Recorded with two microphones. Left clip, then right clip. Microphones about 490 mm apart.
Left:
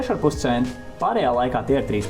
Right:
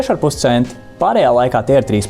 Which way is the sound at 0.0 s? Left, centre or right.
Right.